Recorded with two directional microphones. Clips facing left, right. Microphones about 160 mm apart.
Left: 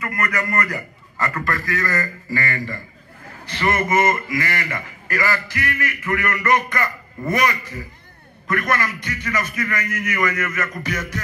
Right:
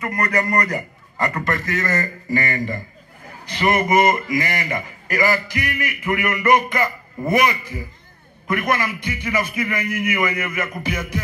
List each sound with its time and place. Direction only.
0.0 s a man's voice: 30° right (ahead or behind); by 11.2 s 10° right (ahead or behind)